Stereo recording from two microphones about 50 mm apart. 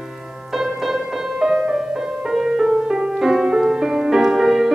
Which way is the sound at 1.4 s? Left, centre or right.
Centre.